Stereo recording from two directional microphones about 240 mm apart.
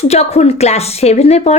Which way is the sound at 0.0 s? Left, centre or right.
Left.